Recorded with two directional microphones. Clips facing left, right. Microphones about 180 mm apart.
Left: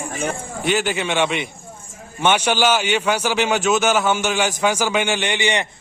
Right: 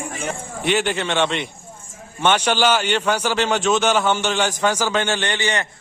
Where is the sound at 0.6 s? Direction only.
Centre (ahead or behind).